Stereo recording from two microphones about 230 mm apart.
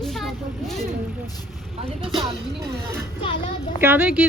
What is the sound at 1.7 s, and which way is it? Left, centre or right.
Speech, right.